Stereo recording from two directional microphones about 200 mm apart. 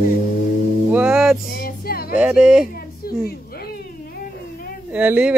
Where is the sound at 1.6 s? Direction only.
50° left (ahead or behind).